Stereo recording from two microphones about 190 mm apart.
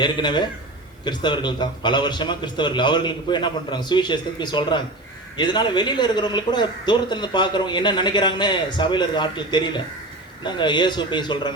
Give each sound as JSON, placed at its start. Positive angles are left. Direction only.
{"t": 0.0, "sound": "a man's voice", "side_deg": 25}